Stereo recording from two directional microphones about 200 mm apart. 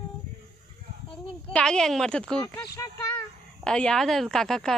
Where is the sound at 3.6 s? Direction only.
5° left (ahead or behind).